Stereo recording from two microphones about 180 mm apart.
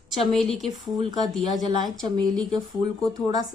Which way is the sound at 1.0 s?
20° right (ahead or behind).